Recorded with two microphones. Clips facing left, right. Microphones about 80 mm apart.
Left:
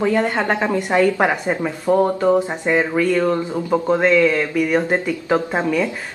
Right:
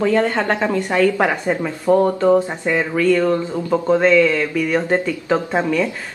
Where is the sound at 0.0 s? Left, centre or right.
Centre.